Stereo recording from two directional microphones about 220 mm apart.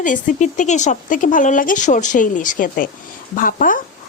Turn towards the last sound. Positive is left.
turn(degrees=40)  # may be behind; listen again after turning